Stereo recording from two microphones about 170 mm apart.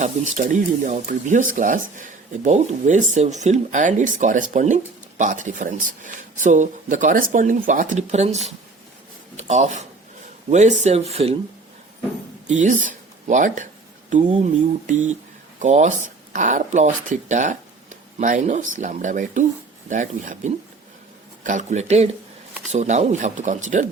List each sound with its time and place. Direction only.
0.0 s speech: 50° right (ahead or behind)
9.4 s speech: 40° right (ahead or behind)
12.5 s speech: 45° right (ahead or behind)